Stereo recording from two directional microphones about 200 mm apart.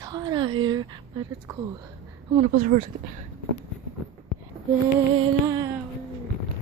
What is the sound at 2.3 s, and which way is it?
Speech, 40° right (ahead or behind).